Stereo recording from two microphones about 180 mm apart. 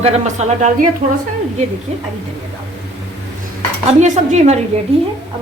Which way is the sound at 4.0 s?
40° right (ahead or behind).